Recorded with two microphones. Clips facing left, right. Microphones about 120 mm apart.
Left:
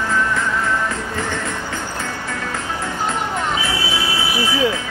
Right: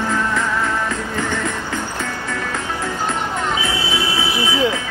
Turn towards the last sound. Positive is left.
turn(degrees=-20)  # may be behind; listen again after turning